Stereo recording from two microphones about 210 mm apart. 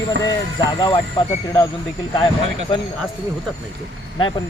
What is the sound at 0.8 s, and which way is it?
Speech, 20° left (ahead or behind).